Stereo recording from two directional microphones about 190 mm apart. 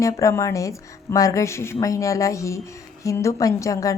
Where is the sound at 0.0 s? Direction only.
15° left (ahead or behind).